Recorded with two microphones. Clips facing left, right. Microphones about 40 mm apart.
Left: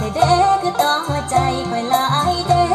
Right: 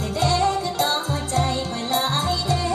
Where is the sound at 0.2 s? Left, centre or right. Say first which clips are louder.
Left 7 dB; left.